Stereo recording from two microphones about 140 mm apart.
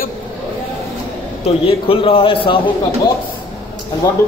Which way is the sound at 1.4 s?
40° left (ahead or behind).